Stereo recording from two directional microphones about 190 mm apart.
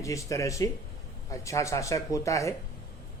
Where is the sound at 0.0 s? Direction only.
15° left (ahead or behind).